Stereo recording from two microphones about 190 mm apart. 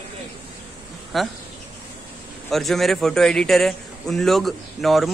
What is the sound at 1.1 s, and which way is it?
Speech, centre (ahead or behind).